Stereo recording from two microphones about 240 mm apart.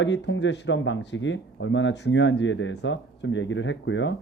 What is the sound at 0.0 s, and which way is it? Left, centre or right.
Speech, left.